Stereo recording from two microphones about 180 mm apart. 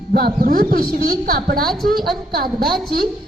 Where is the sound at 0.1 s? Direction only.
55° right (ahead or behind).